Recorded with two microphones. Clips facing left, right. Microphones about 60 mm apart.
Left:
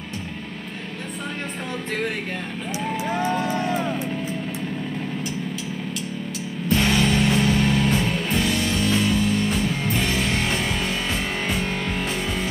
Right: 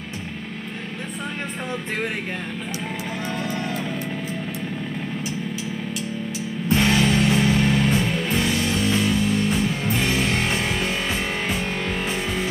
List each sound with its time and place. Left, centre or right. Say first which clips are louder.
3.3 s music: left 3 dB; left
3.5 s vehicle: left 4 dB; centre
6.9 s music: right 1 dB; centre